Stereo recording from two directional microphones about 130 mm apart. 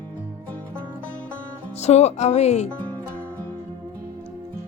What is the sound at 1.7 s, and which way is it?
Speech, 55° left (ahead or behind).